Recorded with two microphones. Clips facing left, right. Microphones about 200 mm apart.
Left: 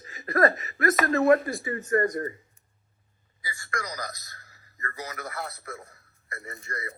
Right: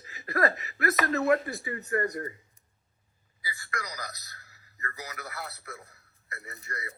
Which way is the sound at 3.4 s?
45° left (ahead or behind).